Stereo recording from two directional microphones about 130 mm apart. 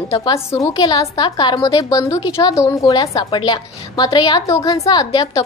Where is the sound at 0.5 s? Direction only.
30° left (ahead or behind).